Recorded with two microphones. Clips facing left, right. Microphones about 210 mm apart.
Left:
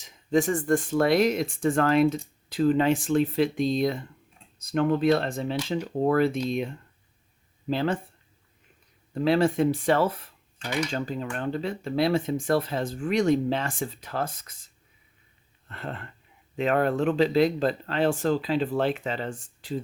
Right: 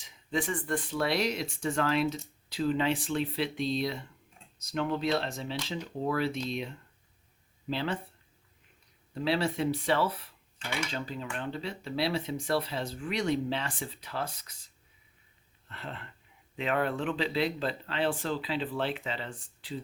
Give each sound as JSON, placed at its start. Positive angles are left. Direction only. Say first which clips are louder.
{"t": 0.0, "sound": "speech", "louder": "left 9 dB", "side_deg": 45}
{"t": 9.1, "sound": "speech", "louder": "left 7 dB", "side_deg": 50}
{"t": 15.7, "sound": "speech", "louder": "left 6 dB", "side_deg": 50}